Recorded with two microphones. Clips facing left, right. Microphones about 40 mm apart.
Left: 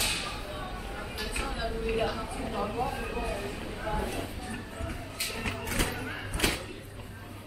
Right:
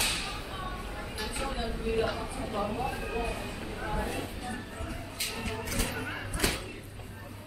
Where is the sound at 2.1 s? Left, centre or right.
Right.